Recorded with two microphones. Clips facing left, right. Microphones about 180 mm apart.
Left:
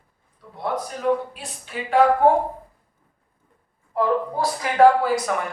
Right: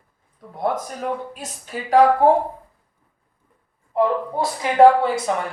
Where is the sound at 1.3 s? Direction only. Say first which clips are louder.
Right 1 dB; 45° right (ahead or behind).